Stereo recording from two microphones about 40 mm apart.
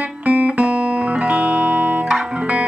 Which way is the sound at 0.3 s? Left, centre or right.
Right.